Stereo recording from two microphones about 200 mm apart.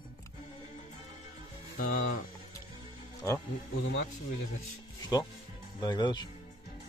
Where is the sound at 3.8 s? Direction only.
65° left (ahead or behind).